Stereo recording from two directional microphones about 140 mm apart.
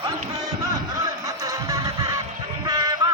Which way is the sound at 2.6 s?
30° right (ahead or behind).